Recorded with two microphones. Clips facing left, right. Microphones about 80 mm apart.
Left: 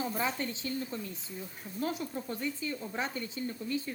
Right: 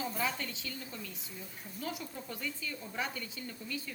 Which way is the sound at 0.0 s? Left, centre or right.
Left.